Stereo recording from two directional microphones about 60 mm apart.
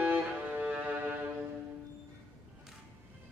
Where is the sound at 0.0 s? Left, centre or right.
Right.